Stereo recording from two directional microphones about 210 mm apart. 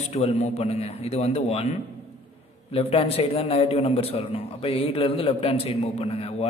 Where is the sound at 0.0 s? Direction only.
30° left (ahead or behind).